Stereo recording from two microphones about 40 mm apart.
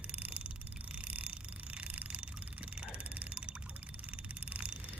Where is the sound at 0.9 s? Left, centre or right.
Right.